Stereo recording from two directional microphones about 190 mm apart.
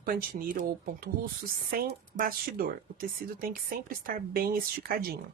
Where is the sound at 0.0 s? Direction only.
50° right (ahead or behind).